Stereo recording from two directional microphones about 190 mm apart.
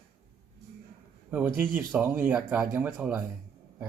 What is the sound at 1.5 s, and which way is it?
Speech, 10° right (ahead or behind).